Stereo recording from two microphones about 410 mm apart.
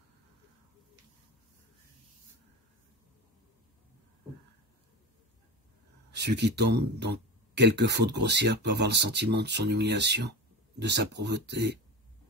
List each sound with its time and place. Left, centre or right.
6.1 s speech: right